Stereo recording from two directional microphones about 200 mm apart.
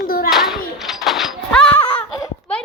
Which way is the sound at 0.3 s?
Centre (ahead or behind).